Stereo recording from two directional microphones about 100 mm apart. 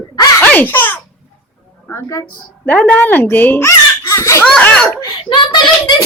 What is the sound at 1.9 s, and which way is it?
Music, 30° left (ahead or behind).